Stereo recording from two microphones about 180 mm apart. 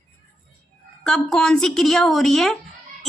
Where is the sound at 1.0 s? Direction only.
5° left (ahead or behind).